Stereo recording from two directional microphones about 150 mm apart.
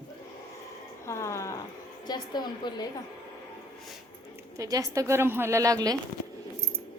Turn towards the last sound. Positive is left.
turn(degrees=-25)  # may be behind; listen again after turning